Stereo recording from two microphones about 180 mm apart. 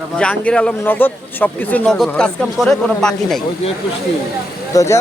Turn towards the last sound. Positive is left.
turn(degrees=15)  # may be behind; listen again after turning